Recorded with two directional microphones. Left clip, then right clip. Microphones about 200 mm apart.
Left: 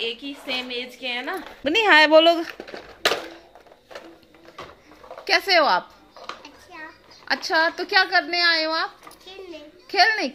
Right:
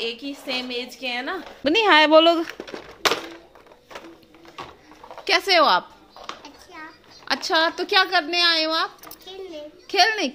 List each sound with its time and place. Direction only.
0.0 s a woman's voice: 15° right (ahead or behind)
2.4 s speech: 35° right (ahead or behind)
5.2 s speech: 10° right (ahead or behind)
7.2 s a woman's voice: 10° right (ahead or behind)